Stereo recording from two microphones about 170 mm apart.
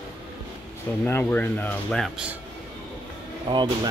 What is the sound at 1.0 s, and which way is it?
Speech, 10° left (ahead or behind).